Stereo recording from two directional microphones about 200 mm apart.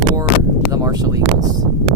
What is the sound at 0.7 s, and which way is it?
Speech, 15° right (ahead or behind).